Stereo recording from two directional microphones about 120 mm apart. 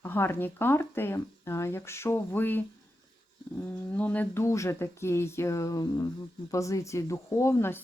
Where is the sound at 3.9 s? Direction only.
15° left (ahead or behind).